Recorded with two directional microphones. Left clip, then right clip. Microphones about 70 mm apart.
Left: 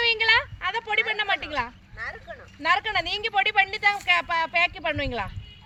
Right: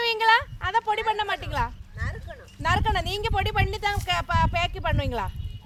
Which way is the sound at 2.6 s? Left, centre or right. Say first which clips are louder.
Left 1 dB; right.